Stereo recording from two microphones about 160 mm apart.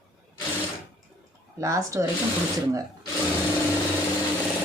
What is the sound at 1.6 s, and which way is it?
Speech, 20° right (ahead or behind).